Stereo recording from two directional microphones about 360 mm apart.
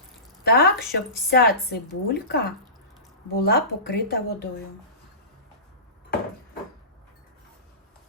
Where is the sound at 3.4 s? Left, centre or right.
Left.